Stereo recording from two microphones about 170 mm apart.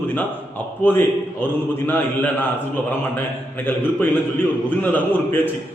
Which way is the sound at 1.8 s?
10° left (ahead or behind).